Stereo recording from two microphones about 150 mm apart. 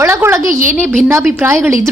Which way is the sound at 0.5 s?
60° right (ahead or behind).